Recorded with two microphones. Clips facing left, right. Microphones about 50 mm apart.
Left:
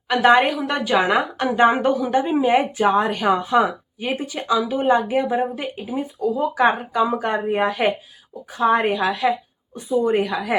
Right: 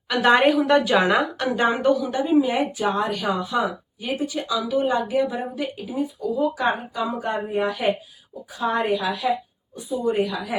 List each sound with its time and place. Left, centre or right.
0.2 s a woman's voice: centre
1.5 s a woman's voice: left
7.7 s speech: left